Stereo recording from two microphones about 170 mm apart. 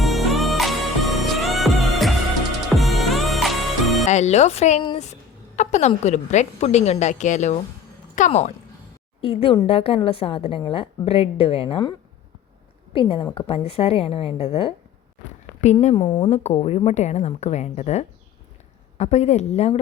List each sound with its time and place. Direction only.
0.0 s music: centre (ahead or behind)
4.0 s speech: 40° left (ahead or behind)
5.5 s a sound: 45° left (ahead or behind)
6.0 s a woman's voice: 45° left (ahead or behind)
16.0 s speech: 30° left (ahead or behind)